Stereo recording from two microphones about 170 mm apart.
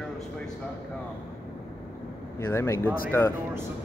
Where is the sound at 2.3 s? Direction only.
15° left (ahead or behind).